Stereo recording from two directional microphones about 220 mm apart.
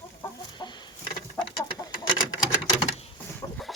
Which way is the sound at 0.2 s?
20° left (ahead or behind).